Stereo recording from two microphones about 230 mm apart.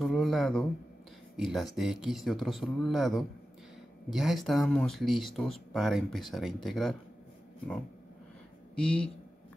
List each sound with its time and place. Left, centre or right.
0.0 s speech: centre
8.7 s speech: centre